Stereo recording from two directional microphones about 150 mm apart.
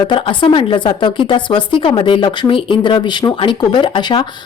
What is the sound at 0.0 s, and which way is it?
A woman's voice, 35° left (ahead or behind).